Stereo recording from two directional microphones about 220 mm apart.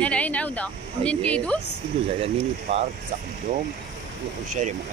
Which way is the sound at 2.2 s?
30° right (ahead or behind).